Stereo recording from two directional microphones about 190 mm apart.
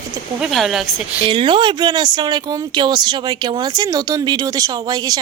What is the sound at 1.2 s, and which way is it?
Speech, 25° right (ahead or behind).